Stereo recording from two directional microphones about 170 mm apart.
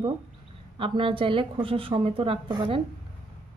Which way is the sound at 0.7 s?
30° right (ahead or behind).